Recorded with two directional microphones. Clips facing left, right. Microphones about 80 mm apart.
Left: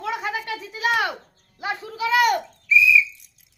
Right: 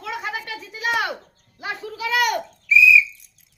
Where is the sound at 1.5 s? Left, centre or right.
Left.